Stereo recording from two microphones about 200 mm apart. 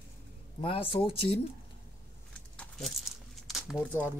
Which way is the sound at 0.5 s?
25° left (ahead or behind).